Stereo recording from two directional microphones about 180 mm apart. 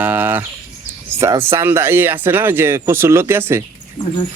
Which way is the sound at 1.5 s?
15° right (ahead or behind).